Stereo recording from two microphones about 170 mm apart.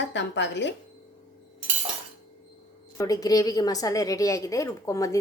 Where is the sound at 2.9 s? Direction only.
20° left (ahead or behind).